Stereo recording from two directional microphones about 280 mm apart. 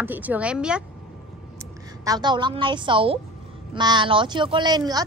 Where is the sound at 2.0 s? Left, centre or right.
Centre.